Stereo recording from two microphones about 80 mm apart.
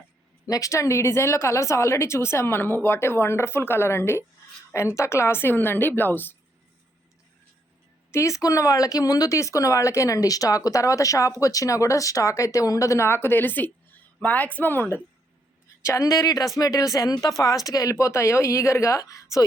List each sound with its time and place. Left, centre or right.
0.4 s a woman's voice: left
8.1 s a woman's voice: left
15.8 s speech: left